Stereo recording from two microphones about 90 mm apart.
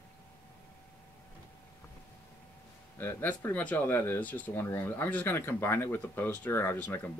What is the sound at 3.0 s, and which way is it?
Speech, 25° left (ahead or behind).